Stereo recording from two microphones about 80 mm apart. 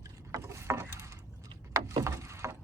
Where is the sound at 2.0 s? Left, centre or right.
Right.